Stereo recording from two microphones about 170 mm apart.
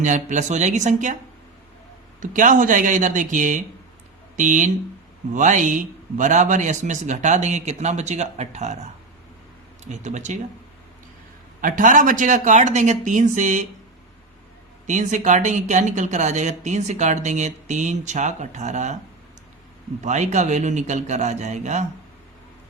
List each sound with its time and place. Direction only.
0.0 s speech: 45° right (ahead or behind)
2.2 s speech: 50° right (ahead or behind)
11.6 s speech: 50° right (ahead or behind)
14.8 s speech: 45° right (ahead or behind)
20.0 s speech: 45° right (ahead or behind)